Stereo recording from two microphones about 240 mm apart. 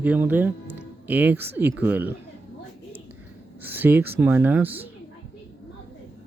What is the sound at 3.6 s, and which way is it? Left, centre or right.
Speech, centre.